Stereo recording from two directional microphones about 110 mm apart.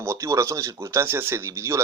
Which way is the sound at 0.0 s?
25° right (ahead or behind).